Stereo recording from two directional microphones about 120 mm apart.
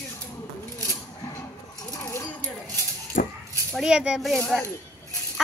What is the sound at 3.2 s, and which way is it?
Dog, 90° left.